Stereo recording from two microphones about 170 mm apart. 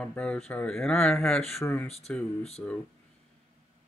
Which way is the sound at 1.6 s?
15° left (ahead or behind).